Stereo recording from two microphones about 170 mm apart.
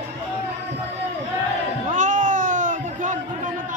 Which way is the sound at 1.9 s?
45° right (ahead or behind).